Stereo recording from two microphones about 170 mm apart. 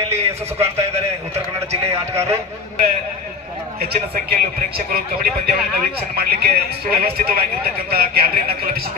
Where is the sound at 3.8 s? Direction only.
65° right (ahead or behind).